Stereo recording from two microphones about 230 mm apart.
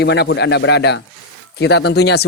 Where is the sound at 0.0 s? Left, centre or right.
Left.